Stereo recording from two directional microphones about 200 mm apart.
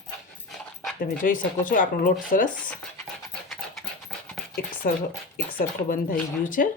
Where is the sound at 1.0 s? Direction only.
45° left (ahead or behind).